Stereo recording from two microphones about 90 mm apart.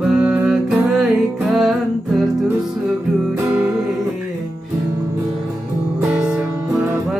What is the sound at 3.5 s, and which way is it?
Music, 15° right (ahead or behind).